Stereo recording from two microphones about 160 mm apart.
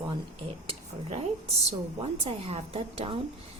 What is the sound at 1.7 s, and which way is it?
A woman's voice, 40° right (ahead or behind).